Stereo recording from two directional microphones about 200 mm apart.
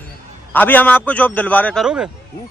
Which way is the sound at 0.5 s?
10° left (ahead or behind).